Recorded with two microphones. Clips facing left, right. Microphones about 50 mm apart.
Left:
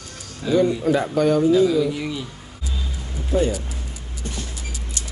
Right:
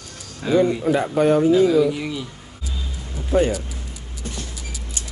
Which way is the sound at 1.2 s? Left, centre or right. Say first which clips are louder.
Right 2 dB; right.